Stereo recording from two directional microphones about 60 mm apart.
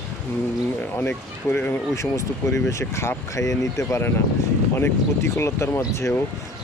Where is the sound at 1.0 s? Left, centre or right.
Left.